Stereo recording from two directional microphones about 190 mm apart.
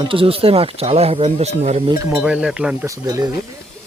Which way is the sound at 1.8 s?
15° right (ahead or behind).